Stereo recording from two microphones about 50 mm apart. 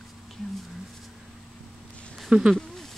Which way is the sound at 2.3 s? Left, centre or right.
Right.